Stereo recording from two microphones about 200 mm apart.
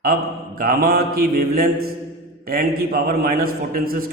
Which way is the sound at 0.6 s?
45° right (ahead or behind).